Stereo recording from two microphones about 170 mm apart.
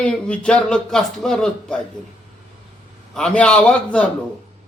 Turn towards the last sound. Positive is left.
turn(degrees=5)  # may be behind; listen again after turning